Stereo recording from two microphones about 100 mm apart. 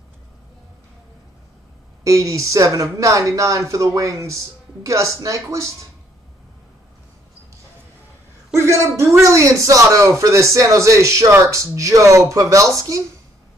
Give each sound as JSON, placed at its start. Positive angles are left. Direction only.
{"t": 2.0, "sound": "speech", "side_deg": -30}
{"t": 8.5, "sound": "speech", "side_deg": -30}